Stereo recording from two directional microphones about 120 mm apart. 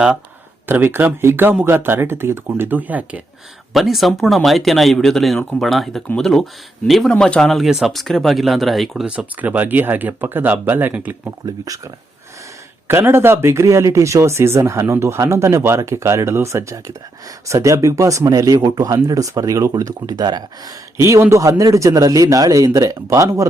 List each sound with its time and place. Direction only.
0.7 s speech: 20° right (ahead or behind)
3.7 s speech: centre (ahead or behind)
11.4 s speech: 30° right (ahead or behind)
12.9 s speech: 20° right (ahead or behind)
21.0 s speech: 25° right (ahead or behind)